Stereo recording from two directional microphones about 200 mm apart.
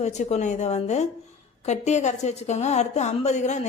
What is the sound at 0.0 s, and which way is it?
A woman's voice, 35° left (ahead or behind).